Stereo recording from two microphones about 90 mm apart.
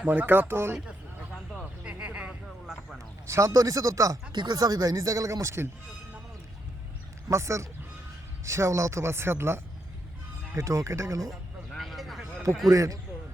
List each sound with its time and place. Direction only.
0.0 s speech: 20° right (ahead or behind)
1.8 s a sound: 15° right (ahead or behind)
3.2 s speech: 35° right (ahead or behind)
4.3 s speech: 50° right (ahead or behind); by 5.6 s 30° right (ahead or behind)
7.3 s speech: 35° right (ahead or behind)
11.3 s vehicle: centre (ahead or behind)
12.7 s speech: 40° right (ahead or behind)